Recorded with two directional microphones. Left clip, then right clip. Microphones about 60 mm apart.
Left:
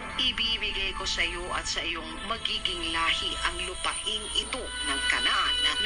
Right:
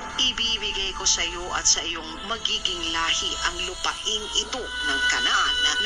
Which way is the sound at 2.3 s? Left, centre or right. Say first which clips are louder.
Right 4 dB; right.